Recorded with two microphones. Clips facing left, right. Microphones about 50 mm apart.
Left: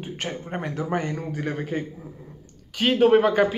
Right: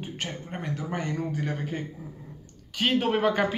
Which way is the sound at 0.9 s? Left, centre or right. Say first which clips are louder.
Left 2 dB; left.